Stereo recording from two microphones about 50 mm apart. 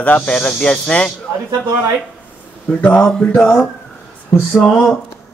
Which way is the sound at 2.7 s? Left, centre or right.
Left.